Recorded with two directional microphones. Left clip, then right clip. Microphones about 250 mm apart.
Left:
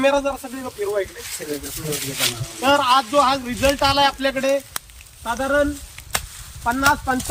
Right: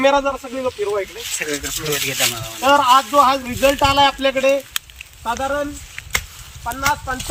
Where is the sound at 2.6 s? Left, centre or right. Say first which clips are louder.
Right 4 dB; centre.